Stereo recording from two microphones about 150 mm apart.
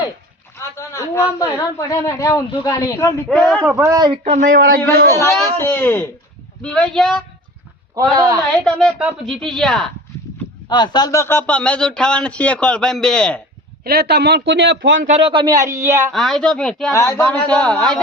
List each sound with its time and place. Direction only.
0.8 s speech: 20° left (ahead or behind)
3.2 s speech: 5° left (ahead or behind)
3.8 s speech: 20° right (ahead or behind)
4.2 s speech: 55° right (ahead or behind); by 4.8 s 85° right
5.5 s speech: 15° left (ahead or behind)
8.1 s speech: 25° right (ahead or behind)
8.4 s speech: 5° left (ahead or behind)
10.7 s speech: 30° left (ahead or behind); by 13.4 s 5° left (ahead or behind)
13.8 s speech: 90° right
15.0 s speech: 45° right (ahead or behind)
15.3 s speech: 30° right (ahead or behind)
16.1 s speech: centre (ahead or behind)
16.9 s speech: 20° left (ahead or behind)